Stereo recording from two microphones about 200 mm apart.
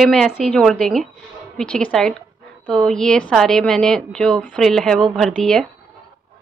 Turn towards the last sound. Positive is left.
turn(degrees=5)  # may be behind; listen again after turning